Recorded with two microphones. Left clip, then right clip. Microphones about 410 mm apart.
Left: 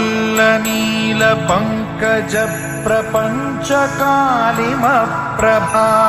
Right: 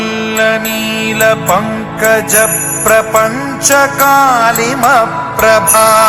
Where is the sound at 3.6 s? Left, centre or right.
Right.